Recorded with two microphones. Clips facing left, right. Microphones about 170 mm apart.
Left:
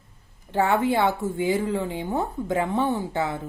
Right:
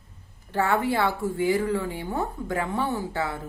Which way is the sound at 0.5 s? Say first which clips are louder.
Left 2 dB; 20° left (ahead or behind).